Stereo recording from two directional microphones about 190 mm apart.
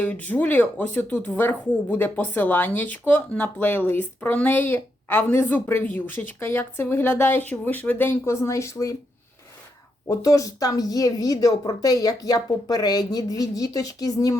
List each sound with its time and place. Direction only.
0.0 s speech: 10° left (ahead or behind)
10.1 s a woman's voice: 15° left (ahead or behind)